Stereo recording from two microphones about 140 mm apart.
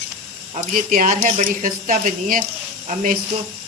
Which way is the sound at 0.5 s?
75° right (ahead or behind).